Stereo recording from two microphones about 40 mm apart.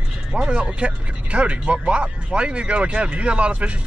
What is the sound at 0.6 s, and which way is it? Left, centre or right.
Speech, right.